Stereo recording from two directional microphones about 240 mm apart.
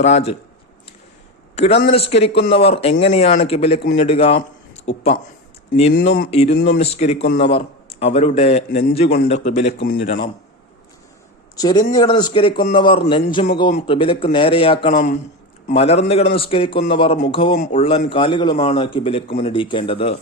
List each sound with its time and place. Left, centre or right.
0.0 s a man's voice: left
1.5 s a man's voice: left
6.6 s speech: left
6.9 s a man's voice: left
11.5 s a man's voice: centre